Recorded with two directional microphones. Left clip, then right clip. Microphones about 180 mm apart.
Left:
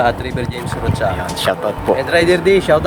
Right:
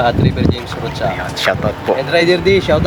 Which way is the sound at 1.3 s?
15° left (ahead or behind).